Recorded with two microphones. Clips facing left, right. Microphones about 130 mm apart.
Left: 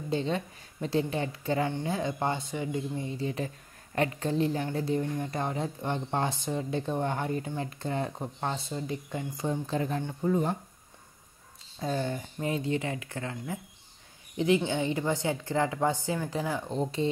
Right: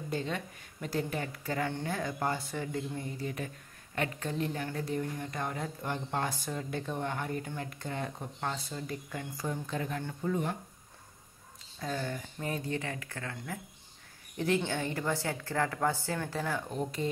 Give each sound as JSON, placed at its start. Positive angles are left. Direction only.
{"t": 0.1, "sound": "speech", "side_deg": 30}
{"t": 11.8, "sound": "a woman's voice", "side_deg": 25}
{"t": 16.6, "sound": "speech", "side_deg": 25}